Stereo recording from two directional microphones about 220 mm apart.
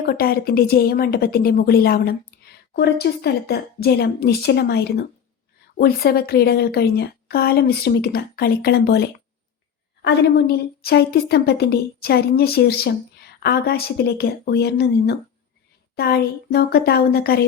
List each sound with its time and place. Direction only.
0.0 s a woman's voice: 45° left (ahead or behind)